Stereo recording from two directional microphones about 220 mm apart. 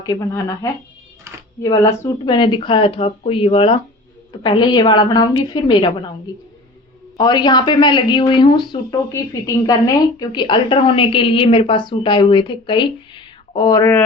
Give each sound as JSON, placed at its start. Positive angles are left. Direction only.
{"t": 0.0, "sound": "a woman's voice", "side_deg": 15}
{"t": 7.2, "sound": "a woman's voice", "side_deg": 20}